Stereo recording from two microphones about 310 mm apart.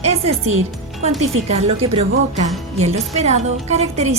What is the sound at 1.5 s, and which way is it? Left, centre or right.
A woman's voice, centre.